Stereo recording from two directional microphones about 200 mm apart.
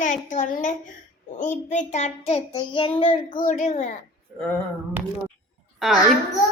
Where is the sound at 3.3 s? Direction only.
40° left (ahead or behind).